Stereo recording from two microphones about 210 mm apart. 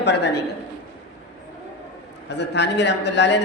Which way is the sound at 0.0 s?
55° left (ahead or behind).